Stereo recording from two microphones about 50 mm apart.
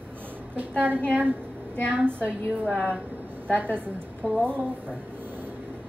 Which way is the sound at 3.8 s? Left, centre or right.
Right.